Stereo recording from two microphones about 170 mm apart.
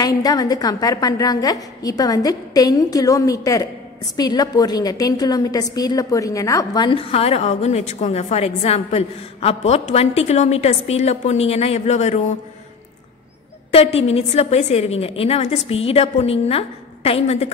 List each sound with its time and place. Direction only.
0.0 s a woman's voice: 20° left (ahead or behind); by 12.2 s 40° left (ahead or behind)
13.7 s a woman's voice: 35° left (ahead or behind)